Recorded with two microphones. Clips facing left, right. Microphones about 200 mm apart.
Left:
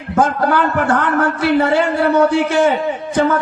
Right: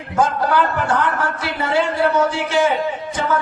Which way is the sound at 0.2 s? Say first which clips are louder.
Left 2 dB; 60° left (ahead or behind).